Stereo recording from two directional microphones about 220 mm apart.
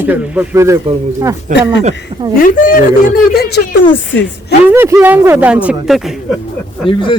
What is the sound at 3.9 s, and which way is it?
Speech, 55° left (ahead or behind).